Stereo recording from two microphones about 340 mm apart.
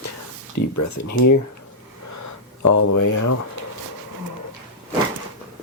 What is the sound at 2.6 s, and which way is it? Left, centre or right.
Speech, left.